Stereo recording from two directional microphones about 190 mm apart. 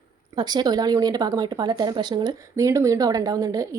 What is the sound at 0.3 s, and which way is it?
Speech, 20° right (ahead or behind).